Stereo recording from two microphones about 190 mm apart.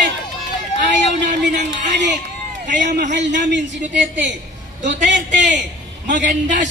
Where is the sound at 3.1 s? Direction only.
70° right (ahead or behind).